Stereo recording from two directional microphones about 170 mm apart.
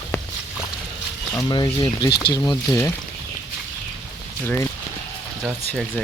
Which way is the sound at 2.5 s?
15° left (ahead or behind).